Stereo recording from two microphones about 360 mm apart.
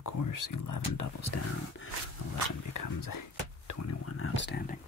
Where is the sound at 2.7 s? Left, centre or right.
Left.